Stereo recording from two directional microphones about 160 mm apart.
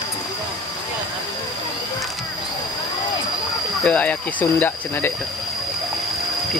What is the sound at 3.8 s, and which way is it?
Speech, 10° left (ahead or behind).